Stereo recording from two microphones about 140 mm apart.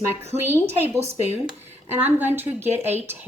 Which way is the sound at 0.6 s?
50° right (ahead or behind).